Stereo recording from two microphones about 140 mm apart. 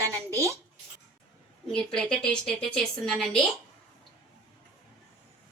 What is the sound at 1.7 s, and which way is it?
Speech, 5° left (ahead or behind).